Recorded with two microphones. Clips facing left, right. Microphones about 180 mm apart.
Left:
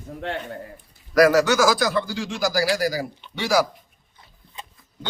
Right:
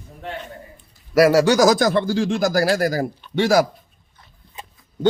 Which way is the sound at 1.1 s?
30° right (ahead or behind).